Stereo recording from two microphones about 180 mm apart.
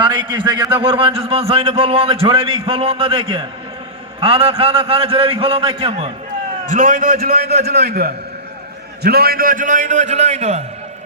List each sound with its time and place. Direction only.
0.0 s a man's voice: 25° right (ahead or behind)
6.7 s a man's voice: 50° right (ahead or behind)